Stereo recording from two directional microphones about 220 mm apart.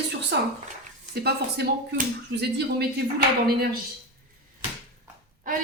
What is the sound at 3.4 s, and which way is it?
Speech, 45° right (ahead or behind).